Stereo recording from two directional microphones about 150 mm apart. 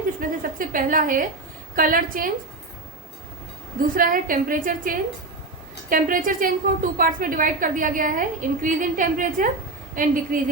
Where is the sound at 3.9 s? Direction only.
65° right (ahead or behind).